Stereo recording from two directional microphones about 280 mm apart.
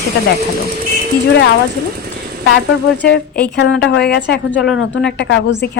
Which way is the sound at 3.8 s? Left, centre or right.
Left.